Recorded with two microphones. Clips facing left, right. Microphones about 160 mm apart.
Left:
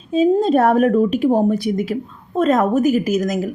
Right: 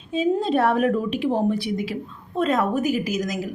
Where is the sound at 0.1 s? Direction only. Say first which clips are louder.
Left 7 dB; 40° left (ahead or behind).